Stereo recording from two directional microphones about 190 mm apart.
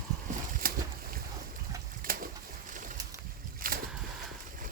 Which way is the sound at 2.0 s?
50° right (ahead or behind).